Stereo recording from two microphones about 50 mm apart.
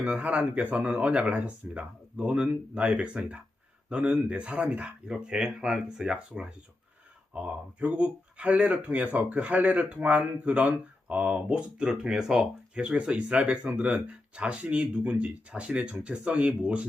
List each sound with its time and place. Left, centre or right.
0.0 s speech: right
11.5 s speech: centre